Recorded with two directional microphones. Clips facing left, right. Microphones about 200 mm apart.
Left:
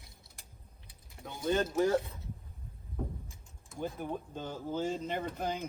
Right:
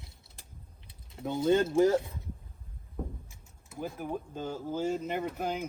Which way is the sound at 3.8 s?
5° right (ahead or behind).